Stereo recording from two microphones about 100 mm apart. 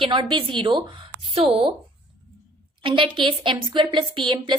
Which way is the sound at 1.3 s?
70° right (ahead or behind).